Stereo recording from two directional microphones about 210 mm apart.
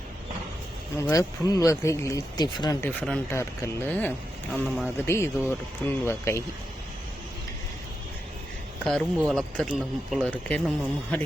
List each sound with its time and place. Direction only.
0.9 s speech: 15° left (ahead or behind)
3.0 s speech: 10° left (ahead or behind)
4.6 s speech: 5° right (ahead or behind)
4.9 s speech: 10° left (ahead or behind)
8.8 s speech: centre (ahead or behind)